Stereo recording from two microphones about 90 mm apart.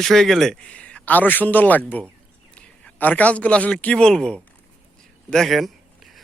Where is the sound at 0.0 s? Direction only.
5° left (ahead or behind).